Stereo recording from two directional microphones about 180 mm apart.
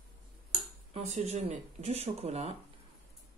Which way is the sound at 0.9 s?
40° right (ahead or behind).